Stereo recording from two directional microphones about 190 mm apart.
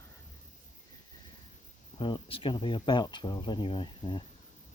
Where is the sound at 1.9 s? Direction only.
25° left (ahead or behind).